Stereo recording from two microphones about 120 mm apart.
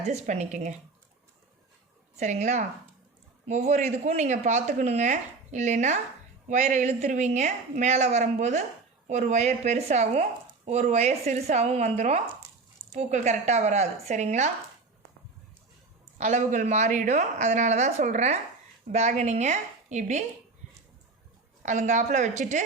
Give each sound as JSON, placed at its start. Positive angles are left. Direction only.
{"t": 0.0, "sound": "a woman's voice", "side_deg": -70}
{"t": 2.1, "sound": "a woman's voice", "side_deg": -75}
{"t": 3.4, "sound": "a woman's voice", "side_deg": -70}
{"t": 16.1, "sound": "speech", "side_deg": -90}
{"t": 18.9, "sound": "a woman's voice", "side_deg": -70}
{"t": 21.6, "sound": "a woman's voice", "side_deg": -90}